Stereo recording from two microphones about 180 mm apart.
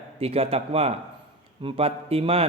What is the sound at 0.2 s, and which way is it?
A man's voice, 35° right (ahead or behind).